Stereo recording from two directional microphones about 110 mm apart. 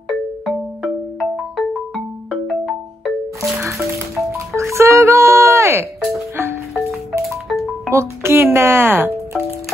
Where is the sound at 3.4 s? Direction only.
25° right (ahead or behind).